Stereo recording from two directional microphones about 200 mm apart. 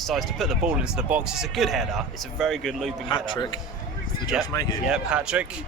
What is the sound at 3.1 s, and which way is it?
A man's voice, 25° left (ahead or behind).